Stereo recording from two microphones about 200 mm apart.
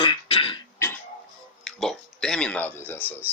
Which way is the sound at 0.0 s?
25° left (ahead or behind).